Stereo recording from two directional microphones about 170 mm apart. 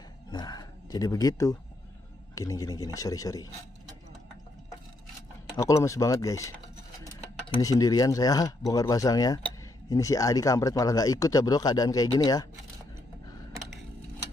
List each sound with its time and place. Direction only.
0.3 s wild animals: 25° left (ahead or behind)
2.3 s speech: 20° left (ahead or behind)
5.6 s speech: 20° left (ahead or behind)